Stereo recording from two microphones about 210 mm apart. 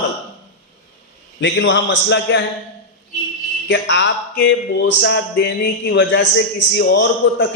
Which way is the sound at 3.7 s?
55° left (ahead or behind).